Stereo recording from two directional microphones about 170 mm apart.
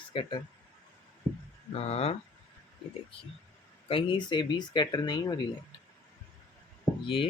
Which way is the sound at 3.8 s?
30° left (ahead or behind).